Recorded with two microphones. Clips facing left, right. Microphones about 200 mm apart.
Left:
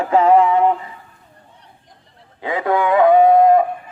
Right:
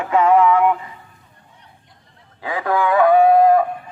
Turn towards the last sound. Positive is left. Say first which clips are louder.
# left 1 dB
turn(degrees=20)  # may be behind; listen again after turning